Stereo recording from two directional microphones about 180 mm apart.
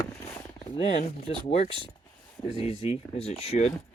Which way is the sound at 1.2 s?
35° left (ahead or behind).